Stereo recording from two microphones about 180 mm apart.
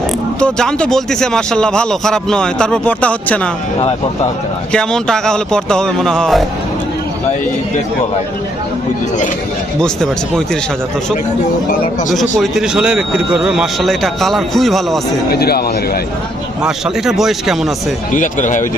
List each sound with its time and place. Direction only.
0.3 s speech: 5° left (ahead or behind)
3.8 s speech: 35° left (ahead or behind)
4.7 s speech: 5° left (ahead or behind)
9.8 s speech: 5° left (ahead or behind)
12.4 s speech: 5° right (ahead or behind)
15.3 s speech: 60° left (ahead or behind)
16.6 s speech: centre (ahead or behind)
18.1 s speech: 45° left (ahead or behind)